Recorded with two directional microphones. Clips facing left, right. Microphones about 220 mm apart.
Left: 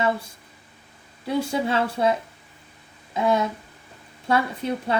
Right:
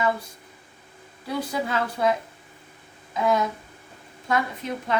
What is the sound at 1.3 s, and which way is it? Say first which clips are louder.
Speech: left 4 dB; 25° left (ahead or behind).